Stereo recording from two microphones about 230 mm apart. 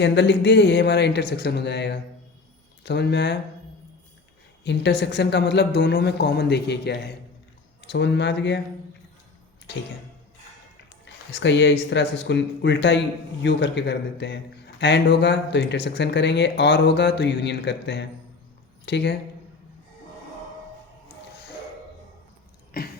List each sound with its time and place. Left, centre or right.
0.0 s a man's voice: left
4.6 s a man's voice: left
11.0 s a man's voice: left
22.7 s a sound: left